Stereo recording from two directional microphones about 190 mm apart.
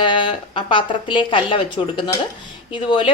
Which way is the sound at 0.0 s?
25° left (ahead or behind).